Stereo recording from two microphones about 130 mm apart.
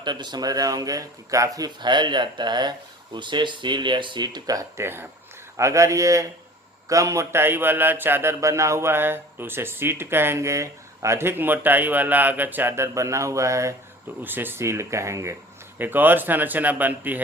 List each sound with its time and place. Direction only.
0.0 s speech: 35° right (ahead or behind); by 17.2 s 15° right (ahead or behind)